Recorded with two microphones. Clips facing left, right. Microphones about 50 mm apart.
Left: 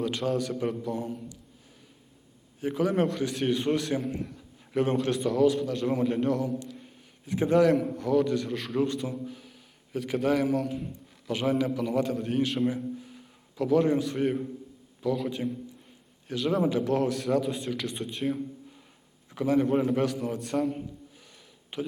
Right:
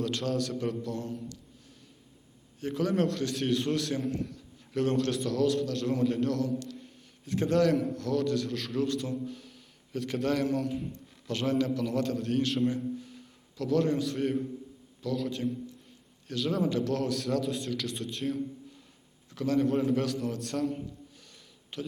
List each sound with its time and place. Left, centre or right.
0.0 s a man's voice: centre
2.6 s a man's voice: centre